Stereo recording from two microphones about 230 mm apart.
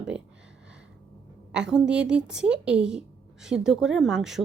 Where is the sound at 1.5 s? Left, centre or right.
Centre.